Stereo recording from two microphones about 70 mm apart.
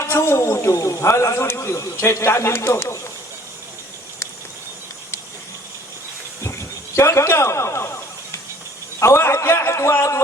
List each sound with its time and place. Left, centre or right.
0.0 s a man's voice: left
6.4 s snake: left
9.0 s a man's voice: left